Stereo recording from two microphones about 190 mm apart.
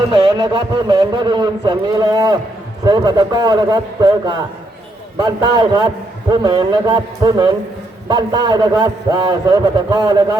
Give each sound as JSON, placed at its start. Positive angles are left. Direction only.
{"t": 0.1, "sound": "a man's voice", "side_deg": -25}